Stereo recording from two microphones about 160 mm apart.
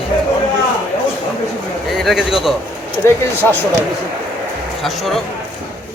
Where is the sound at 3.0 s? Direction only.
15° left (ahead or behind).